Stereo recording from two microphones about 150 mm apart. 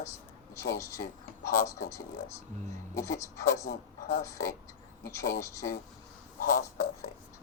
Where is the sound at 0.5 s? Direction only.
20° left (ahead or behind).